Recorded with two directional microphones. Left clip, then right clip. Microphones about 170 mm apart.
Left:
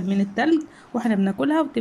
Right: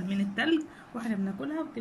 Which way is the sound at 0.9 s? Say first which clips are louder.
Left 12 dB; 50° left (ahead or behind).